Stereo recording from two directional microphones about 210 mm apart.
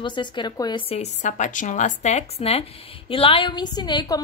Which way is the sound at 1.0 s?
35° left (ahead or behind).